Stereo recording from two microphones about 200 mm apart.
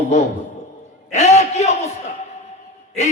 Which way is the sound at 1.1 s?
35° left (ahead or behind).